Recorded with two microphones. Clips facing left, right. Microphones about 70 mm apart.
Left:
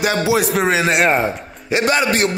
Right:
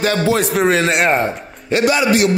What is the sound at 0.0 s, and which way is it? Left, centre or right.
A man's voice, centre.